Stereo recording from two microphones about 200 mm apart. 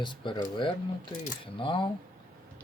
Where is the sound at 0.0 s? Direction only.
20° left (ahead or behind).